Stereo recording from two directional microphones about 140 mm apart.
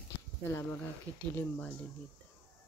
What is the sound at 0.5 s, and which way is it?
Speech, 20° left (ahead or behind).